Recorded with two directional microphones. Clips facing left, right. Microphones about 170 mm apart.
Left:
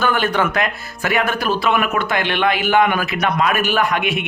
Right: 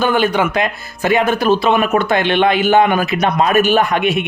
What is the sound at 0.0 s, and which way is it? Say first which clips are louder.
Speech: right 3 dB; 15° right (ahead or behind).